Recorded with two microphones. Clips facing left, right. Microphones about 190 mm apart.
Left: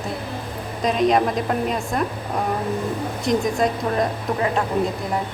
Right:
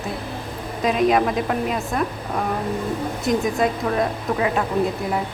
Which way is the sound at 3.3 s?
5° right (ahead or behind).